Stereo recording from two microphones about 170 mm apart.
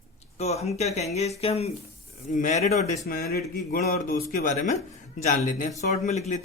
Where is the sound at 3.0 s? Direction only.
65° left (ahead or behind); by 6.4 s 40° left (ahead or behind).